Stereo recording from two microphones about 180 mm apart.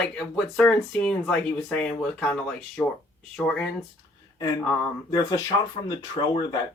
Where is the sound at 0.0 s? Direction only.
5° left (ahead or behind).